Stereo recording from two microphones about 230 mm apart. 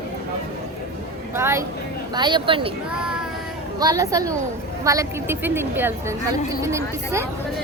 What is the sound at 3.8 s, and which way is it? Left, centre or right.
Speech, centre.